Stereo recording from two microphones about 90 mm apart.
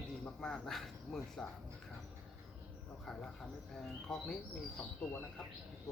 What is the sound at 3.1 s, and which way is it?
Speech, 5° left (ahead or behind).